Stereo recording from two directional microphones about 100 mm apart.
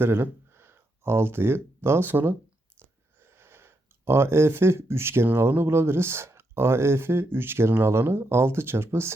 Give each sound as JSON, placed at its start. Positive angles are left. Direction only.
{"t": 0.0, "sound": "speech", "side_deg": -20}